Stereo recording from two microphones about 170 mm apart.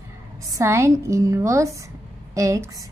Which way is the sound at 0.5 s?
15° right (ahead or behind).